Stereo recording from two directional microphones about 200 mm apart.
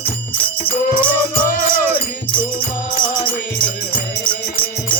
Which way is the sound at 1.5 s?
45° left (ahead or behind).